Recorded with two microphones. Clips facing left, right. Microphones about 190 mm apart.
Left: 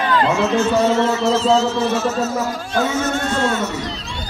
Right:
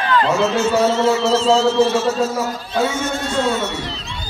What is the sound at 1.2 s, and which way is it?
Speech, 5° left (ahead or behind).